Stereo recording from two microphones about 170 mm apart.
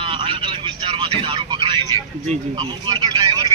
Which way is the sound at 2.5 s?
30° right (ahead or behind).